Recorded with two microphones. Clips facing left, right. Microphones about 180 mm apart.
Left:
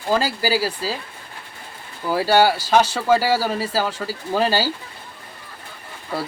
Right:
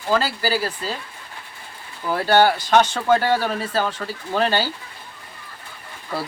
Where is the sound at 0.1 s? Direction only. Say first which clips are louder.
Left 1 dB; 15° left (ahead or behind).